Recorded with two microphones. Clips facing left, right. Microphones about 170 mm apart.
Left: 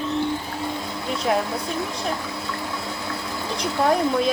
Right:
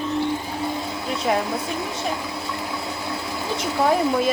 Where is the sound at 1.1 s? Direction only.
Centre (ahead or behind).